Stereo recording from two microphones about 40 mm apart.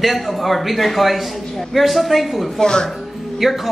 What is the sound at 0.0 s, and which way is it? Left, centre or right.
Speech, centre.